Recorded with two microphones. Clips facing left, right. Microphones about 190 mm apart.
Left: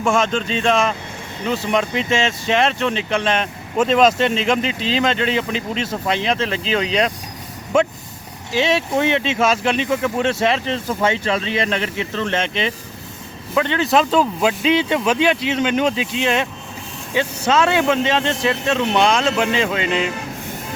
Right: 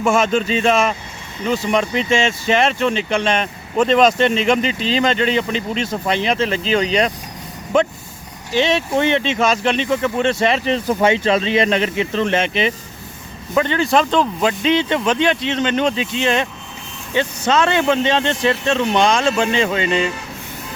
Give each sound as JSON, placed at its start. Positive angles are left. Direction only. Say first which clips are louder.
{"t": 0.0, "sound": "speech", "louder": "right 2 dB", "side_deg": -5}
{"t": 10.7, "sound": "speech", "louder": "right 4 dB", "side_deg": -15}